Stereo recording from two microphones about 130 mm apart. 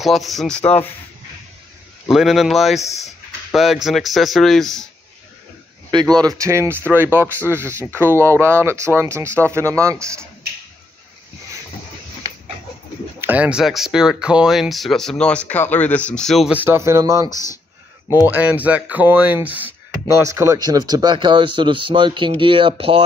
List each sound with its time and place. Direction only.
0.0 s speech: centre (ahead or behind)
2.0 s speech: centre (ahead or behind)
5.9 s speech: 35° right (ahead or behind)
13.2 s speech: 10° right (ahead or behind); by 16.4 s 5° left (ahead or behind)
16.4 s speech: 15° right (ahead or behind)
17.3 s speech: 30° left (ahead or behind)
18.2 s speech: 15° right (ahead or behind); by 23.0 s 45° right (ahead or behind)